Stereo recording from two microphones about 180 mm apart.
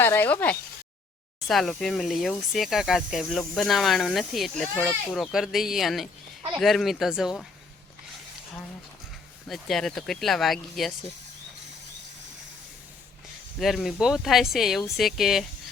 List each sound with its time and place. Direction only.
0.0 s a sound: 10° left (ahead or behind)
1.5 s speech: centre (ahead or behind)
9.5 s speech: centre (ahead or behind)
13.6 s speech: centre (ahead or behind)